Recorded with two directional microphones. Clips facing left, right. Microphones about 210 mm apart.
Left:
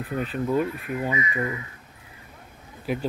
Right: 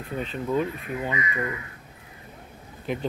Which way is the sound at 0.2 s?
5° left (ahead or behind).